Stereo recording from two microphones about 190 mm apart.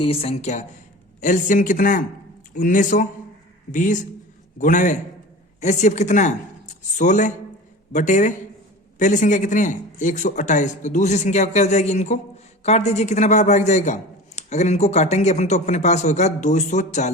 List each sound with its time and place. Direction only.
0.0 s a man's voice: 30° left (ahead or behind)